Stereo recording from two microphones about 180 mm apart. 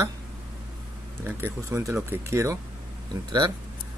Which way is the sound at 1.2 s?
15° right (ahead or behind).